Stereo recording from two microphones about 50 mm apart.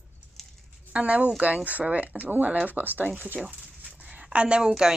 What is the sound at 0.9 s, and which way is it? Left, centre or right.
Speech, right.